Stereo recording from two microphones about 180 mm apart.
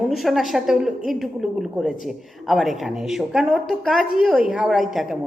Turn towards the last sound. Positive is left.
turn(degrees=0)  # may be behind; listen again after turning